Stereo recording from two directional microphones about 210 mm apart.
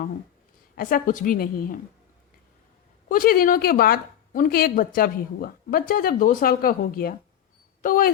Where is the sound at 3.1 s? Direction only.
40° left (ahead or behind).